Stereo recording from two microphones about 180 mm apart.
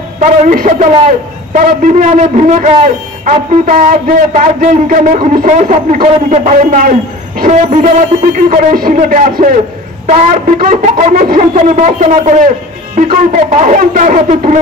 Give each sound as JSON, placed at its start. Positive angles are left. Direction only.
{"t": 0.2, "sound": "a man's voice", "side_deg": -45}